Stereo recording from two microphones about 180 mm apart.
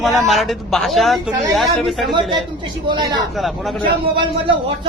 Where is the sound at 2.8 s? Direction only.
25° right (ahead or behind).